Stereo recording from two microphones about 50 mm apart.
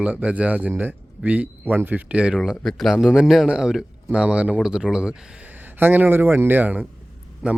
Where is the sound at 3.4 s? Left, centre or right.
Centre.